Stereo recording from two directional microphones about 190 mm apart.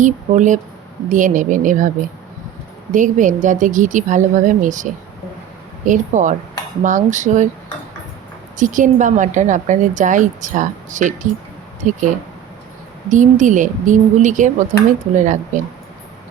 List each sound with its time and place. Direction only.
0.0 s a woman's voice: 40° right (ahead or behind)
2.9 s a woman's voice: 40° right (ahead or behind)
8.5 s a woman's voice: 40° right (ahead or behind)
13.1 s a woman's voice: 40° right (ahead or behind)